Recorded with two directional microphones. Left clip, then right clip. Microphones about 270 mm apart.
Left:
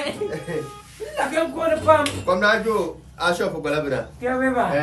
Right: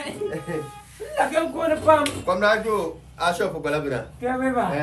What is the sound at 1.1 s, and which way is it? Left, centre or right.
Speech, centre.